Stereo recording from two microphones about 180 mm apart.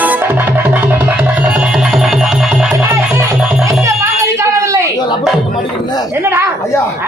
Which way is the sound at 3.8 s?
15° right (ahead or behind).